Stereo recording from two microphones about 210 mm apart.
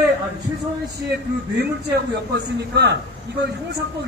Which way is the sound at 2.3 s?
55° right (ahead or behind).